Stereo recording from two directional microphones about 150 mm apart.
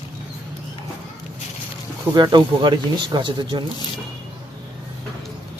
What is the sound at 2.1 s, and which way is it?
Speech, 30° right (ahead or behind).